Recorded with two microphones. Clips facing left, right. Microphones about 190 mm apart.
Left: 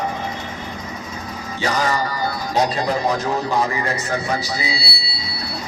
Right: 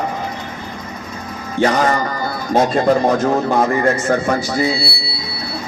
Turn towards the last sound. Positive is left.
turn(degrees=-50)  # may be behind; listen again after turning